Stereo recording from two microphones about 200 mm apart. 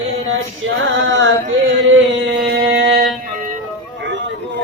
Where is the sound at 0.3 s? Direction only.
75° right (ahead or behind).